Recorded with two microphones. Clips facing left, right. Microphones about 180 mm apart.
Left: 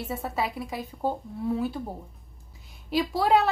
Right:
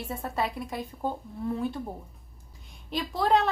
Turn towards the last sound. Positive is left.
turn(degrees=10)  # may be behind; listen again after turning